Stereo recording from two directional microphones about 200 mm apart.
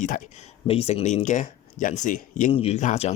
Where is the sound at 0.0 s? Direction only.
35° left (ahead or behind).